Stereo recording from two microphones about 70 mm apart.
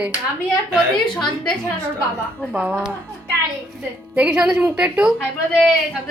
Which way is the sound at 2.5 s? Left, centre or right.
Centre.